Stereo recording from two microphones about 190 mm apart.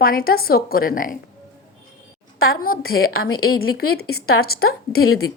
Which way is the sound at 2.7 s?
90° left.